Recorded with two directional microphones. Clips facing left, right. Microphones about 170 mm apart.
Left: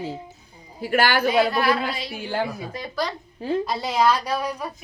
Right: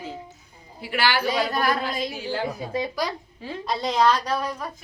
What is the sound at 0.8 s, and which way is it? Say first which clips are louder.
Speech: left 4 dB; 45° left (ahead or behind).